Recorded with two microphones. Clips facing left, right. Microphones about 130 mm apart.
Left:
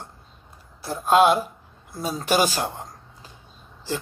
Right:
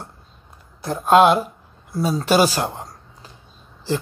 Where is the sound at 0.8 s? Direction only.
50° right (ahead or behind).